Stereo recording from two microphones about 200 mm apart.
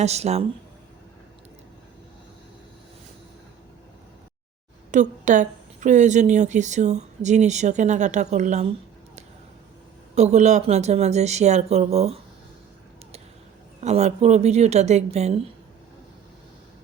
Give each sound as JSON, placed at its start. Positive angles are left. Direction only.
{"t": 0.0, "sound": "speech", "side_deg": -35}
{"t": 4.9, "sound": "speech", "side_deg": -40}
{"t": 10.2, "sound": "speech", "side_deg": -35}
{"t": 13.8, "sound": "speech", "side_deg": -35}